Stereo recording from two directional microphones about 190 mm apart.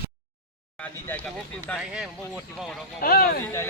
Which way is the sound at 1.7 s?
5° right (ahead or behind).